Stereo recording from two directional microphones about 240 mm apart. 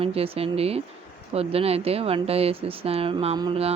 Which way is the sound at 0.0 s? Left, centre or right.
Right.